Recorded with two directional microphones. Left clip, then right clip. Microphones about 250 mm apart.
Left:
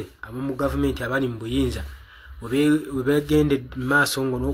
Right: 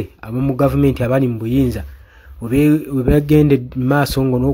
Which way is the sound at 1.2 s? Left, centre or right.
Right.